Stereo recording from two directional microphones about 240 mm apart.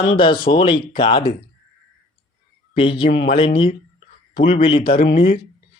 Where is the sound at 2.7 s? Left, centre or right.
Left.